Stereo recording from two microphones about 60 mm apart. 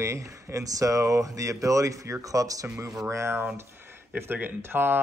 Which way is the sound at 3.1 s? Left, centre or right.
Right.